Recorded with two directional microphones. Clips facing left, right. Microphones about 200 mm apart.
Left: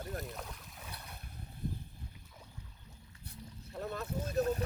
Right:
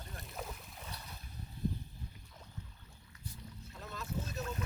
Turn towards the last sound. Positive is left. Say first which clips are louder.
# left 7 dB
turn(degrees=55)  # may be behind; listen again after turning